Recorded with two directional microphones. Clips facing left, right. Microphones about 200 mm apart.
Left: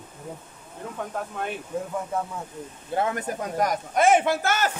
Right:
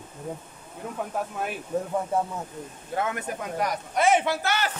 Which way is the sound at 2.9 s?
35° left (ahead or behind).